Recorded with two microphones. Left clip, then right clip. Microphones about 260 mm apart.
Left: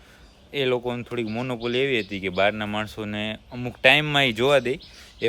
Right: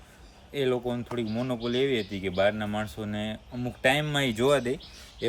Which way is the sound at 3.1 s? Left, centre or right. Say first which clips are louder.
Left 5 dB; left.